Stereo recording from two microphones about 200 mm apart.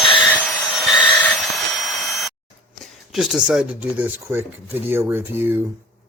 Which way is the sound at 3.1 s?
5° right (ahead or behind).